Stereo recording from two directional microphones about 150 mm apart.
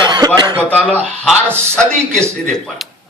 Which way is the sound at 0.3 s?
30° right (ahead or behind).